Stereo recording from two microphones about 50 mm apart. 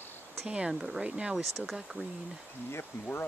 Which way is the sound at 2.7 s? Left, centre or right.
Left.